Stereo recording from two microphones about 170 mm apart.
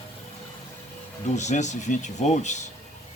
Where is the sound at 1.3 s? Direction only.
45° left (ahead or behind).